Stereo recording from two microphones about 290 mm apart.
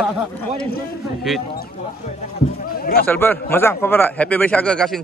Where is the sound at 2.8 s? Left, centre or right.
Left.